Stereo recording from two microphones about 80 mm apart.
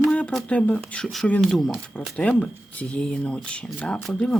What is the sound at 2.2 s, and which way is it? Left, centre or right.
Speech, centre.